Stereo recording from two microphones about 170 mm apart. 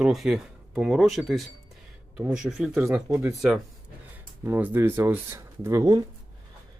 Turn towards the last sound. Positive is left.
turn(degrees=-20)  # may be behind; listen again after turning